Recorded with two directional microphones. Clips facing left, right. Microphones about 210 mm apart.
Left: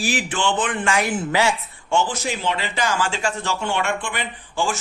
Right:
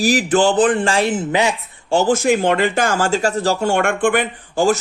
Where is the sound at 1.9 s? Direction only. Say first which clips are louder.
Right 8 dB; 45° right (ahead or behind).